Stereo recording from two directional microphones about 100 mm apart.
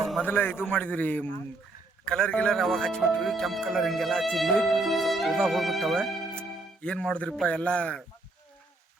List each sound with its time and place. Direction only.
0.3 s a man's voice: 20° left (ahead or behind)